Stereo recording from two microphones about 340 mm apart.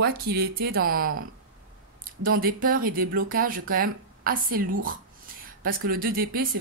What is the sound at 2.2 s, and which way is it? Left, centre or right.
Speech, right.